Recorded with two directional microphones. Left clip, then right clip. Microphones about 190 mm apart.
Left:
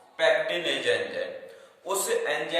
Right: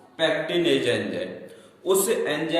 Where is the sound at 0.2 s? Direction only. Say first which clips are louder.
Right 1 dB; 20° right (ahead or behind).